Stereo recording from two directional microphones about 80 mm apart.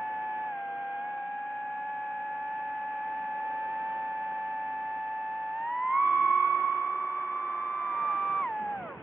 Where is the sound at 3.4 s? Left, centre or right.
Centre.